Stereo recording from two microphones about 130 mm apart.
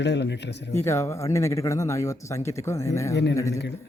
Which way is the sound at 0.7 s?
20° left (ahead or behind).